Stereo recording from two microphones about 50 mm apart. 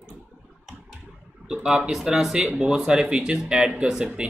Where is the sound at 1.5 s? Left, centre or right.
Centre.